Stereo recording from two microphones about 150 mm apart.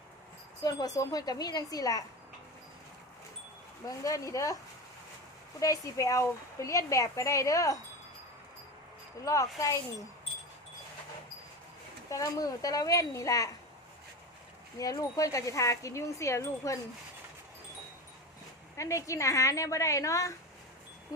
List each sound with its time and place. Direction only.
0.6 s a woman's voice: 25° left (ahead or behind)
3.8 s a woman's voice: 20° left (ahead or behind)
5.5 s a woman's voice: 20° left (ahead or behind)
9.2 s a woman's voice: 20° left (ahead or behind)
12.1 s a woman's voice: 25° left (ahead or behind)
14.8 s a woman's voice: 25° left (ahead or behind)
18.8 s a woman's voice: 20° left (ahead or behind)